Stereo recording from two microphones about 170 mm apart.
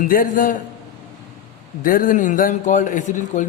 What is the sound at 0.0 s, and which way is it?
Speech, 55° left (ahead or behind).